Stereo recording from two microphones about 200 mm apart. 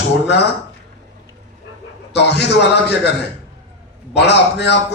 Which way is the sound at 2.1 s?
55° left (ahead or behind).